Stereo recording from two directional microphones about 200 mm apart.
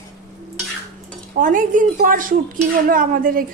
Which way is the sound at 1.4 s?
40° right (ahead or behind).